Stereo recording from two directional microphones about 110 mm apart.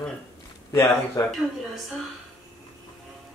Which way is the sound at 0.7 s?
25° left (ahead or behind).